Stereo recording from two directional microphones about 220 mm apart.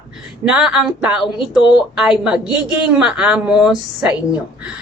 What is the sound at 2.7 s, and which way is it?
A woman's voice, 5° right (ahead or behind).